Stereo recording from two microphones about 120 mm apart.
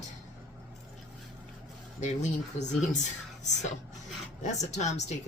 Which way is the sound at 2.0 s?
85° left.